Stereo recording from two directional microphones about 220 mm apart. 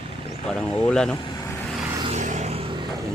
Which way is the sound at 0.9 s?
5° left (ahead or behind).